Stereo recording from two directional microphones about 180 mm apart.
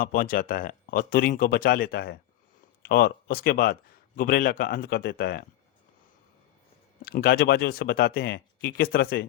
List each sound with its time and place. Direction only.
0.0 s a man's voice: 50° left (ahead or behind)
7.0 s a man's voice: 55° left (ahead or behind)